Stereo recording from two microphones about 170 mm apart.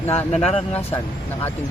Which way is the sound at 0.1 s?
35° left (ahead or behind).